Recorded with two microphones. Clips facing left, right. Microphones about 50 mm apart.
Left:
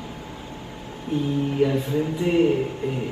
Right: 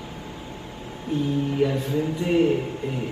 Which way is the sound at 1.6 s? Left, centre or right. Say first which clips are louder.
Left 3 dB; centre.